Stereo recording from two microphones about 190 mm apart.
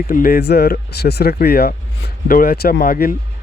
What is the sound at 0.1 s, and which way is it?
Speech, 50° left (ahead or behind).